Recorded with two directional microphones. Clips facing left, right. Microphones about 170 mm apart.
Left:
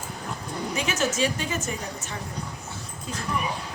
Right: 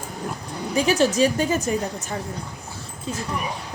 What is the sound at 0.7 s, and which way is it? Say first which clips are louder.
A woman's voice: right 8 dB; 35° right (ahead or behind).